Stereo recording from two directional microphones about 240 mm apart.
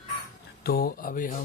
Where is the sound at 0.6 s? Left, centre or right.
Left.